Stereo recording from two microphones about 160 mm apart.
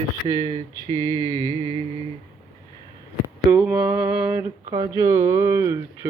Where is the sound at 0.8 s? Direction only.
25° right (ahead or behind).